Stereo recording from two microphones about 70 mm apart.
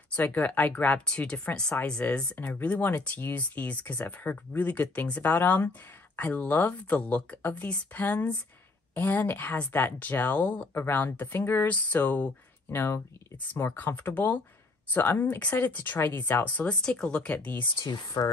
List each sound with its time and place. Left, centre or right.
0.1 s speech: left
2.3 s speech: left
12.7 s speech: left
16.8 s speech: centre
17.8 s speech: left